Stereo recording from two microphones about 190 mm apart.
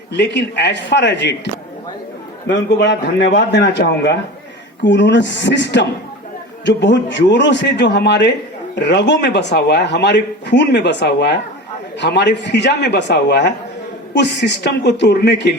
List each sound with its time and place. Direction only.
0.1 s a man's voice: 65° left (ahead or behind)
2.5 s a man's voice: 65° left (ahead or behind)